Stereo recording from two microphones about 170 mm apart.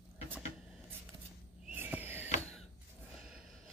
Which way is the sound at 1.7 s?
10° right (ahead or behind).